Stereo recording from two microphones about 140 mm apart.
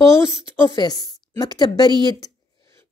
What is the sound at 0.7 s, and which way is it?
A woman's voice, 30° left (ahead or behind).